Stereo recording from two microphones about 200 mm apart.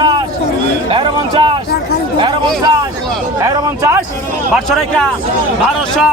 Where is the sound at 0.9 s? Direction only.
25° right (ahead or behind).